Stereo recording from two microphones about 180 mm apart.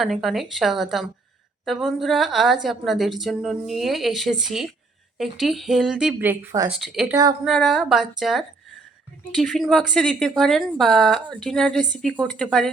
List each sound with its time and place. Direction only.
0.0 s a woman's voice: centre (ahead or behind)
6.7 s a woman's voice: centre (ahead or behind)
7.1 s speech: 20° right (ahead or behind)
7.4 s a woman's voice: centre (ahead or behind)